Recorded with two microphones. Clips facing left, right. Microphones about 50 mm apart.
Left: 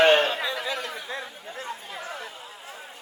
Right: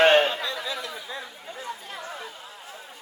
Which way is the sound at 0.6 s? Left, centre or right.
Left.